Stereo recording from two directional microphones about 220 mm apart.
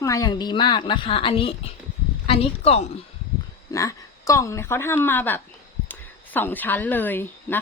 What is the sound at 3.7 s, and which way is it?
Speech, 15° left (ahead or behind).